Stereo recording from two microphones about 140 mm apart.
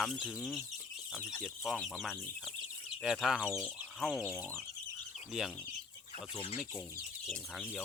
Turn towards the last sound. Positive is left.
turn(degrees=45)  # may be behind; listen again after turning